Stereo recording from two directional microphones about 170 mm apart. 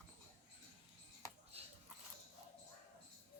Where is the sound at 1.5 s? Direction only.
35° right (ahead or behind).